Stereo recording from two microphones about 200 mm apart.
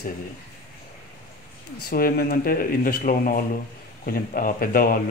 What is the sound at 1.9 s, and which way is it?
Speech, 50° left (ahead or behind).